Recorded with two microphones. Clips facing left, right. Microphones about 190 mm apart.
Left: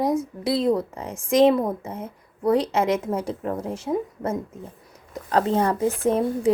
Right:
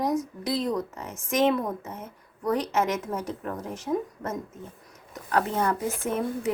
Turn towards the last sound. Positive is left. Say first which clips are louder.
# left 7 dB
turn(degrees=30)  # may be behind; listen again after turning